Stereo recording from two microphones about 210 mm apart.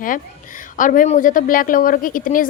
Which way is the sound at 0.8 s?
40° left (ahead or behind).